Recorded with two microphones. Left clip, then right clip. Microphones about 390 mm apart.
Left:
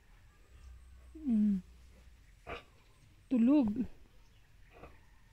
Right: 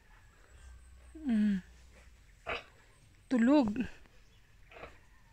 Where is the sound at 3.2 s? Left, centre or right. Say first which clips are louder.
Right 2 dB; right.